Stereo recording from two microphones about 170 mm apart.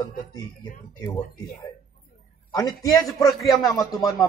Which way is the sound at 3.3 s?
Centre (ahead or behind).